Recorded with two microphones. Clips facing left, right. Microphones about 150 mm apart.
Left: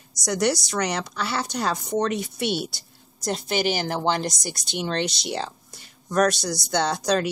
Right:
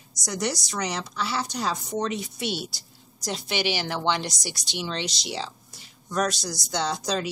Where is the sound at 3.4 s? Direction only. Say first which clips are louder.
Left 3 dB; 45° left (ahead or behind).